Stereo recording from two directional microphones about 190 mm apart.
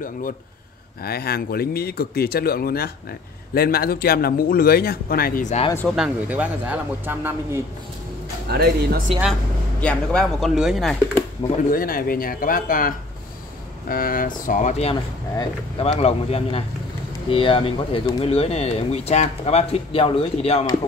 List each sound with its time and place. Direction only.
1.0 s speech: 55° left (ahead or behind); by 5.7 s 40° left (ahead or behind)
5.9 s speech: 5° right (ahead or behind)
8.5 s speech: 55° right (ahead or behind)
9.8 s speech: 5° left (ahead or behind)
11.7 s speech: 50° left (ahead or behind); by 20.6 s 30° left (ahead or behind)